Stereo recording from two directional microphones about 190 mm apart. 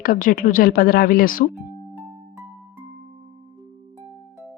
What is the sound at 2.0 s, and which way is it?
Music, 10° right (ahead or behind).